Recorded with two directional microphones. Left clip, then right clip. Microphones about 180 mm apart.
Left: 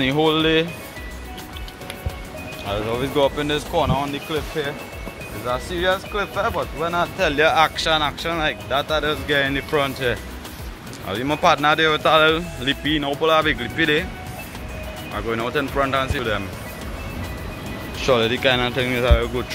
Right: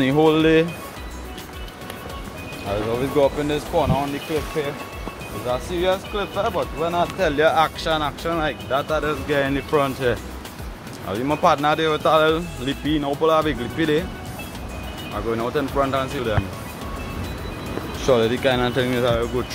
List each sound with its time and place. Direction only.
0.0 s speech: 20° right (ahead or behind)
2.7 s speech: centre (ahead or behind)
5.5 s speech: 10° left (ahead or behind)
7.2 s speech: 5° right (ahead or behind)
11.1 s speech: 5° right (ahead or behind)
15.1 s speech: 5° right (ahead or behind)
18.0 s speech: 15° right (ahead or behind)
18.6 s speech: 20° right (ahead or behind)